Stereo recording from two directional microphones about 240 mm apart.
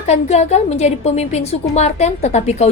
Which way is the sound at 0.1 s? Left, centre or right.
Left.